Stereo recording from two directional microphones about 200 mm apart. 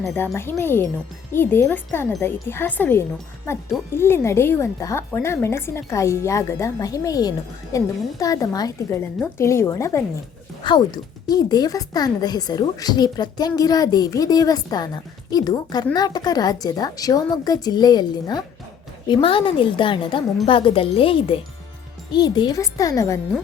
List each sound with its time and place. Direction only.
0.0 s a woman's voice: 5° left (ahead or behind)